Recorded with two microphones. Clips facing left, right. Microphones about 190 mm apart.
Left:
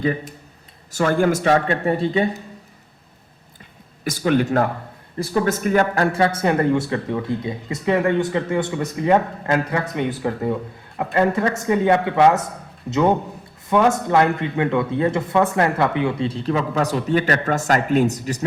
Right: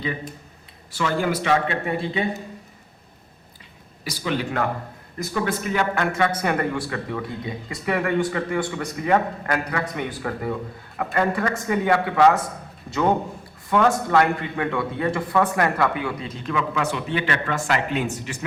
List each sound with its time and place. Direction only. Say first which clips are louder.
0.9 s speech: left 5 dB; 50° left (ahead or behind)
4.0 s speech: left 7 dB; 50° left (ahead or behind); by 12.4 s 20° left (ahead or behind)
13.7 s speech: left 2 dB; 20° left (ahead or behind); by 18.4 s 40° left (ahead or behind)